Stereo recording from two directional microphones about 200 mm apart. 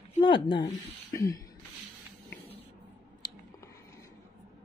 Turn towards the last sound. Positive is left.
turn(degrees=20)  # may be behind; listen again after turning